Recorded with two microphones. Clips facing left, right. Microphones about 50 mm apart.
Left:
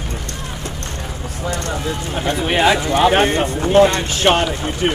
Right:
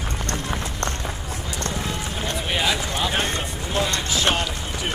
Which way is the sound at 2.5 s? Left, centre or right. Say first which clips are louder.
Left 9 dB; left.